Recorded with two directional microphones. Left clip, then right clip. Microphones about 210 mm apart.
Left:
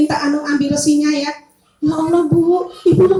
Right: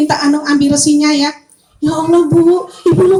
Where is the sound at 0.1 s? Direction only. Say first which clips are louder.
Right 5 dB; 50° right (ahead or behind).